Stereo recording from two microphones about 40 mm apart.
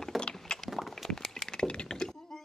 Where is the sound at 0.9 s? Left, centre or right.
Centre.